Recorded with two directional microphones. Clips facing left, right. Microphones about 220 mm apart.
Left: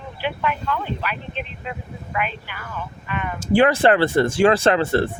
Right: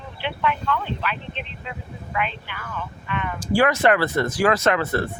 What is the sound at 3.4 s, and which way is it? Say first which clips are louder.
A man's voice: left 3 dB; 25° left (ahead or behind).